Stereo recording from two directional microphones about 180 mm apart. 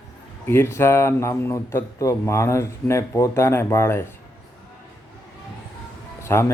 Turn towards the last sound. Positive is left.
turn(degrees=15)  # may be behind; listen again after turning